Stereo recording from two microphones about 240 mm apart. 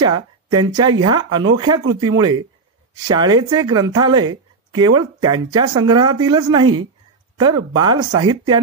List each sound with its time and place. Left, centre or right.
0.0 s speech: centre